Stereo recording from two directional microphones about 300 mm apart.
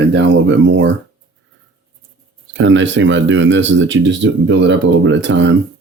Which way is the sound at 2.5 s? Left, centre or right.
Right.